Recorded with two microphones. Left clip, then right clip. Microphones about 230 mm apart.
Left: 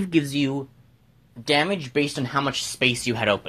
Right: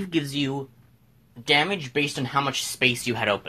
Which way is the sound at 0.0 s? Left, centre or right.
Left.